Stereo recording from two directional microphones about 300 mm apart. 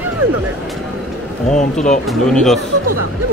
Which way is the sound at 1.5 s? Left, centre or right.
Left.